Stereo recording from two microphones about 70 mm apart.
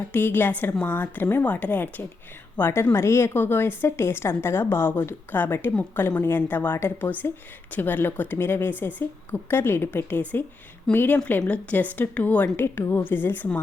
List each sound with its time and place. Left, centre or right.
0.1 s a woman's voice: left
3.3 s a woman's voice: left
12.5 s a woman's voice: left